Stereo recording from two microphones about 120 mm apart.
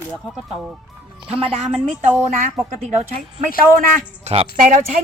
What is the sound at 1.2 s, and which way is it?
Speech, 50° right (ahead or behind).